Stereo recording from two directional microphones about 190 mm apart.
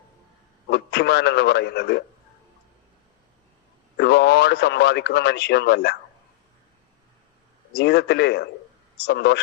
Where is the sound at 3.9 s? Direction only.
60° left (ahead or behind).